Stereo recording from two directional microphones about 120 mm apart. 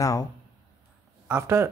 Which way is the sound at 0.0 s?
30° left (ahead or behind).